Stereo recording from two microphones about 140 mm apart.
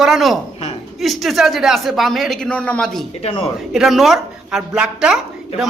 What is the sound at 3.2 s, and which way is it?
Speech, 45° left (ahead or behind).